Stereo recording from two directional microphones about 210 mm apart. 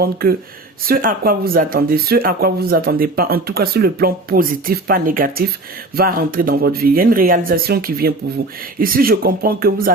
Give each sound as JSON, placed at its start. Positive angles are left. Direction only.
{"t": 0.0, "sound": "speech", "side_deg": -45}